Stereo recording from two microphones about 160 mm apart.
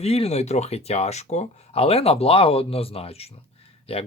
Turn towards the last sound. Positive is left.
turn(degrees=35)  # may be behind; listen again after turning